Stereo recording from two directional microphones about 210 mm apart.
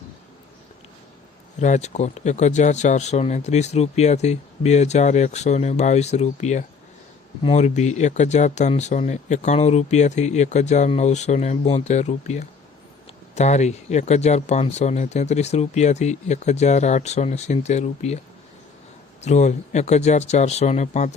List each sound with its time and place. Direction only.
1.6 s speech: 35° left (ahead or behind)
19.2 s speech: 35° left (ahead or behind)